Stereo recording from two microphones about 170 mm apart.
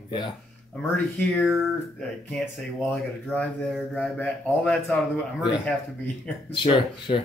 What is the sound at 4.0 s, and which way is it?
A man's voice, 10° left (ahead or behind).